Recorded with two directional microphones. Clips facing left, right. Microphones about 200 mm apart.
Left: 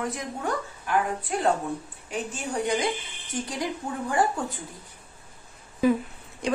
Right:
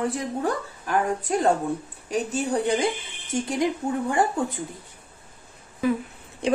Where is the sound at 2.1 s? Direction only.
40° right (ahead or behind).